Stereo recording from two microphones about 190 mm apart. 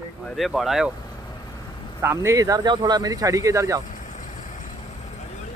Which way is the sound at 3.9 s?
40° left (ahead or behind).